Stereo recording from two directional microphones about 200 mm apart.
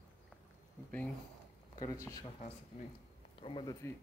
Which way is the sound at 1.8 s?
15° left (ahead or behind).